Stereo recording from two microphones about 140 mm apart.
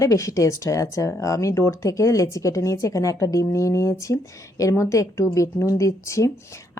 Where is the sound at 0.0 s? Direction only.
25° left (ahead or behind).